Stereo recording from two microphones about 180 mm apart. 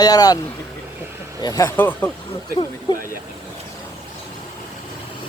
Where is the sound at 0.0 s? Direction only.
20° left (ahead or behind).